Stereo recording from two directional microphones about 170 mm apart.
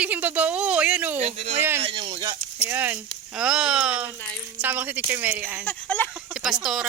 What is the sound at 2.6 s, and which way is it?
Speech, 10° right (ahead or behind).